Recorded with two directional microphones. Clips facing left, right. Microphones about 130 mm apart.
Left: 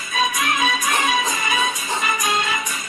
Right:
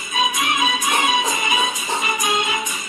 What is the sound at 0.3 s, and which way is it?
Music, 25° right (ahead or behind).